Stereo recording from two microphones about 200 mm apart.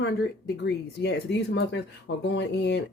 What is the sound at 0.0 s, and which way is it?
Speech, 55° left (ahead or behind).